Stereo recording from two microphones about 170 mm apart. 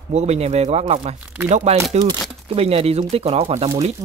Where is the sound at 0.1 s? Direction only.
40° right (ahead or behind).